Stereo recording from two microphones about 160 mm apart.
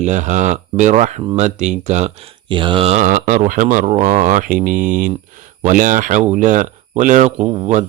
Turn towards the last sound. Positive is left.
turn(degrees=-45)  # may be behind; listen again after turning